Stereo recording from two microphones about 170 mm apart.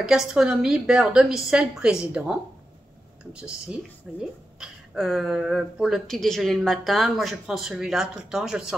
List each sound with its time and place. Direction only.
0.0 s speech: 5° right (ahead or behind)